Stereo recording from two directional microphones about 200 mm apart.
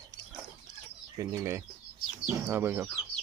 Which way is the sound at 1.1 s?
15° right (ahead or behind).